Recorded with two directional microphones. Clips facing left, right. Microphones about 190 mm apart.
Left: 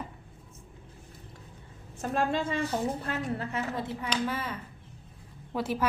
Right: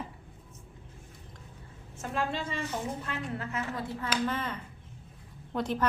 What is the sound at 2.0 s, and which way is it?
Speech, 45° left (ahead or behind).